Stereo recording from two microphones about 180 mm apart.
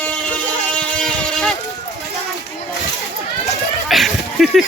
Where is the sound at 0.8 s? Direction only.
5° left (ahead or behind).